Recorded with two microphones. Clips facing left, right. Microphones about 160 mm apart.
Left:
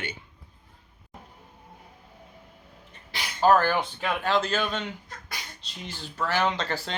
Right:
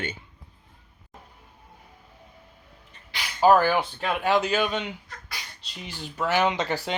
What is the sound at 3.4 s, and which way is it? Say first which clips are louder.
Speech: right 2 dB; 10° right (ahead or behind).